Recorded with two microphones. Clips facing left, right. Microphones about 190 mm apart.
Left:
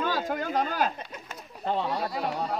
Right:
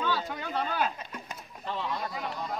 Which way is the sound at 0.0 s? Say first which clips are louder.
Left 3 dB; 45° left (ahead or behind).